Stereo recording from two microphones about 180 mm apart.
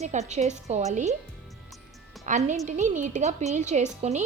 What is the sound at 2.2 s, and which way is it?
A woman's voice, 40° right (ahead or behind).